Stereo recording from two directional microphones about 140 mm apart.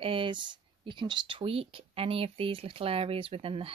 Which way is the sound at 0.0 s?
40° right (ahead or behind).